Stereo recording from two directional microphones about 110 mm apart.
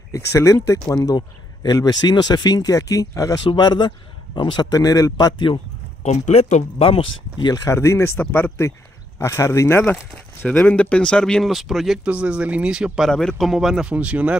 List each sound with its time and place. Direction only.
0.1 s speech: 30° left (ahead or behind)
6.0 s speech: 90° left; by 7.7 s 40° left (ahead or behind)
7.7 s speech: 25° left (ahead or behind); by 14.3 s 15° right (ahead or behind)